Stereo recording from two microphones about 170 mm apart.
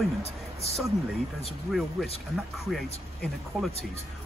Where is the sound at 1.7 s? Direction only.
Centre (ahead or behind).